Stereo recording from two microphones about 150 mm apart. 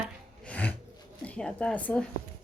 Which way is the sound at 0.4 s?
10° left (ahead or behind).